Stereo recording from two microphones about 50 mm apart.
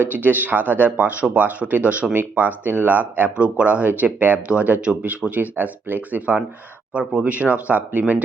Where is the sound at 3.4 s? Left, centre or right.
Right.